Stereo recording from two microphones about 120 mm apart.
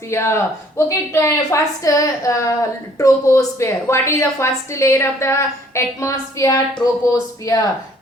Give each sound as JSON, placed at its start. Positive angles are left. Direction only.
{"t": 0.1, "sound": "a woman's voice", "side_deg": 20}